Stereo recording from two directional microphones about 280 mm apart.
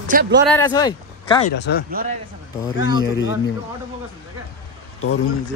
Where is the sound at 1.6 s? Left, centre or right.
Left.